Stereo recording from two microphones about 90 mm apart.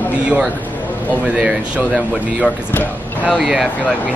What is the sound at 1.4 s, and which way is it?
Speech, 5° right (ahead or behind).